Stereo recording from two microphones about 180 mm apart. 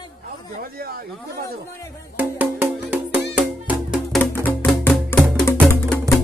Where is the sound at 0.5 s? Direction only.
55° right (ahead or behind).